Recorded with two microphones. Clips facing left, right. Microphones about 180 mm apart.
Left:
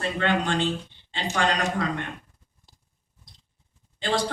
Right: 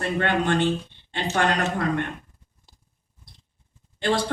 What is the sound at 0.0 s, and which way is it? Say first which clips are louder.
A woman's voice: right 2 dB; 55° right (ahead or behind).